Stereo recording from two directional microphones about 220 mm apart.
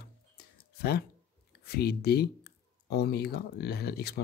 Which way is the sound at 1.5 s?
45° left (ahead or behind).